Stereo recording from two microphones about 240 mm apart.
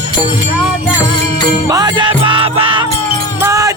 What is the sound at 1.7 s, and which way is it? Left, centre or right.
Music, centre.